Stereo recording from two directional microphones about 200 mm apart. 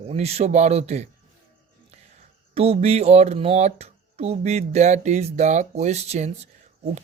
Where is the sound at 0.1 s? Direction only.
30° right (ahead or behind).